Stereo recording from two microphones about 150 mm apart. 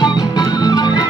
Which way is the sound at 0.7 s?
25° left (ahead or behind).